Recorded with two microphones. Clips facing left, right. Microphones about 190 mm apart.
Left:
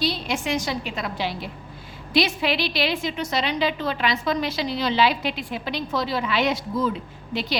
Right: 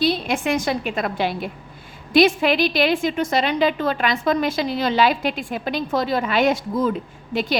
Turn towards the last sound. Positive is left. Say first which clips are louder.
# right 4 dB
turn(degrees=-50)  # may be behind; listen again after turning